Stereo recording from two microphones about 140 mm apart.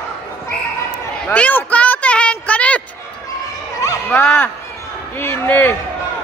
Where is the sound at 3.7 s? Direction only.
20° left (ahead or behind).